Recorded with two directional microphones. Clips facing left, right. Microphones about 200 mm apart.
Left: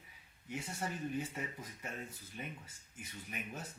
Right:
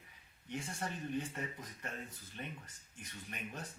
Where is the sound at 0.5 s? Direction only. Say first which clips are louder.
Even; 5° left (ahead or behind).